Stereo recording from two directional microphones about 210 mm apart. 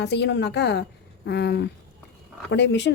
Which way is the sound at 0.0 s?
55° left (ahead or behind).